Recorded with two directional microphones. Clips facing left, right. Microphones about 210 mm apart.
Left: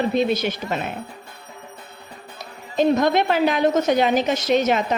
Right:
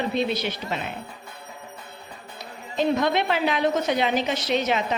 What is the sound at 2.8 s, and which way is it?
A woman's voice, 45° left (ahead or behind).